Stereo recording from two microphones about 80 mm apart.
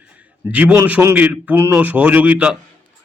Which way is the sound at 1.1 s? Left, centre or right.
Centre.